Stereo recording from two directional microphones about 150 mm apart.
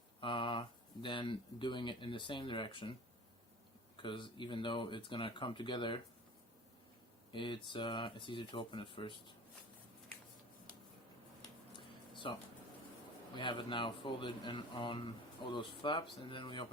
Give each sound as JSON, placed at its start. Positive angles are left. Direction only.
{"t": 0.2, "sound": "a sound", "side_deg": 35}
{"t": 1.0, "sound": "speech", "side_deg": 35}
{"t": 3.9, "sound": "speech", "side_deg": 35}
{"t": 7.3, "sound": "speech", "side_deg": 35}
{"t": 11.8, "sound": "a sound", "side_deg": 35}
{"t": 13.3, "sound": "speech", "side_deg": 30}